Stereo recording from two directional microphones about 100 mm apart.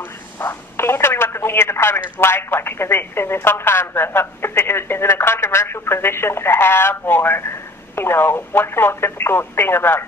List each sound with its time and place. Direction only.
0.4 s speech: 25° left (ahead or behind)